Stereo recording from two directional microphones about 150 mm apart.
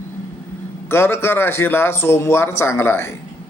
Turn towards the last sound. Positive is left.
turn(degrees=15)  # may be behind; listen again after turning